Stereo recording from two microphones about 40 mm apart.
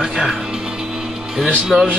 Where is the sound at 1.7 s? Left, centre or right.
Centre.